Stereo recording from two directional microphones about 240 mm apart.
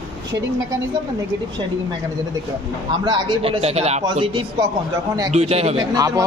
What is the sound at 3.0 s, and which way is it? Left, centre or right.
A man's voice, right.